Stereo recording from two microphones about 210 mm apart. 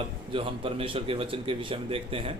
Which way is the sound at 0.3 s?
25° right (ahead or behind).